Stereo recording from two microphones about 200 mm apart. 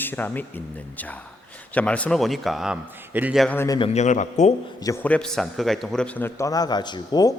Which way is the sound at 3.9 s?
35° left (ahead or behind).